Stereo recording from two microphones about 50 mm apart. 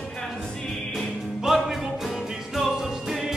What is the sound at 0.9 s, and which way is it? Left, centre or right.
Music, centre.